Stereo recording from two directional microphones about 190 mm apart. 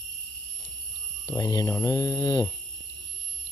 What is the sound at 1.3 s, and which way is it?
Speech, 20° left (ahead or behind).